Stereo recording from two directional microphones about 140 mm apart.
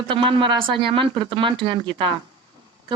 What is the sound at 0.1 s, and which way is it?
Speech, 35° right (ahead or behind).